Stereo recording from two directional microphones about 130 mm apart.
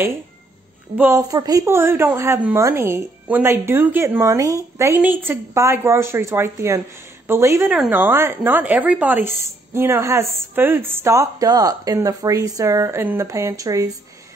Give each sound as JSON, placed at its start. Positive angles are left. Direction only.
{"t": 0.9, "sound": "a woman's voice", "side_deg": -15}
{"t": 1.3, "sound": "a woman's voice", "side_deg": -30}